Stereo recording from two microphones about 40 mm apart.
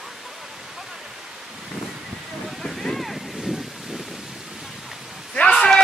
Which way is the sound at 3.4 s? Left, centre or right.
Centre.